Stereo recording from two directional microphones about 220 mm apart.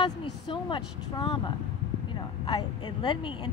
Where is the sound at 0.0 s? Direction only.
20° left (ahead or behind).